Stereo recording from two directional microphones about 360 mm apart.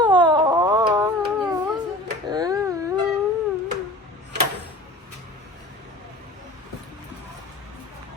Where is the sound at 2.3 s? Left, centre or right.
Centre.